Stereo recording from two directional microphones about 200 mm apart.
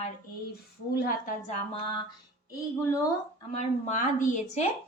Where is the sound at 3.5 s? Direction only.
35° left (ahead or behind).